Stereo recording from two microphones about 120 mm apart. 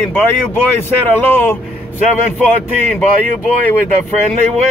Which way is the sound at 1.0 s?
15° left (ahead or behind).